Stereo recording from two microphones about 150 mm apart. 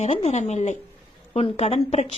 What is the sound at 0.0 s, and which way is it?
Speech, 45° left (ahead or behind).